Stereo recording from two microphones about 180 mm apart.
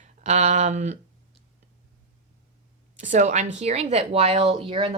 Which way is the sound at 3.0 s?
45° right (ahead or behind).